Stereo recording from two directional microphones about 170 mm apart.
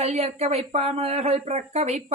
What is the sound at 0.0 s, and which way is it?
Speech, 40° right (ahead or behind).